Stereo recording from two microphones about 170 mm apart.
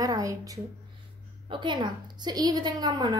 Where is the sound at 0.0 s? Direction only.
20° right (ahead or behind).